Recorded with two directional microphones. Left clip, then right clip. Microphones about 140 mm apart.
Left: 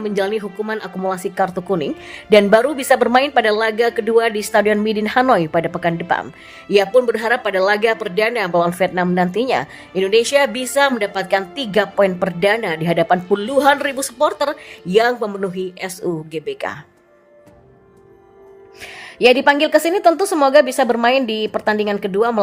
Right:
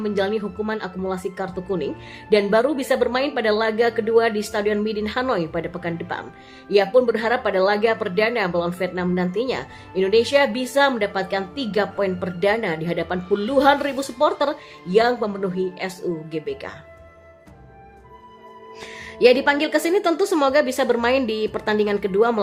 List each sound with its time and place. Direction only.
0.0 s speech: 45° left (ahead or behind)
18.9 s a woman's voice: 20° left (ahead or behind)